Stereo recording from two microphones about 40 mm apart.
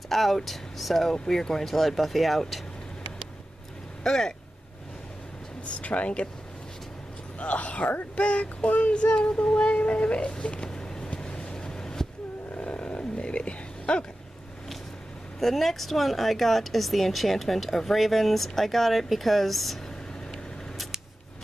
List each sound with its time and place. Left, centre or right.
0.1 s a woman's voice: centre
4.0 s speech: centre
5.8 s speech: left
7.3 s speech: left
8.2 s child singing: left
9.8 s speech: left; by 11.1 s centre
11.1 s vehicle: centre
12.5 s roaring cats: left
15.4 s a woman's voice: centre